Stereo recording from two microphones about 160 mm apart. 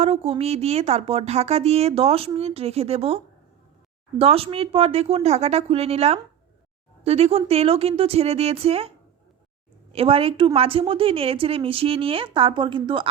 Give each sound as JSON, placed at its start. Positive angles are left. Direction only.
{"t": 0.0, "sound": "speech", "side_deg": -40}
{"t": 4.2, "sound": "speech", "side_deg": -35}
{"t": 9.9, "sound": "speech", "side_deg": -35}